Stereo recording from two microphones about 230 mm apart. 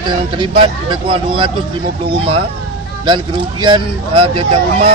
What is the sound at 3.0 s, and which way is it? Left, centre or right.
Speech, right.